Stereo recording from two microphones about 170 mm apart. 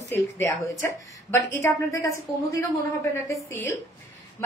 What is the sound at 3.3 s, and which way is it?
Speech, 15° left (ahead or behind).